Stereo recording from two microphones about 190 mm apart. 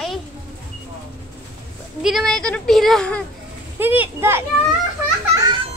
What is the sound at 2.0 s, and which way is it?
Speech, centre (ahead or behind).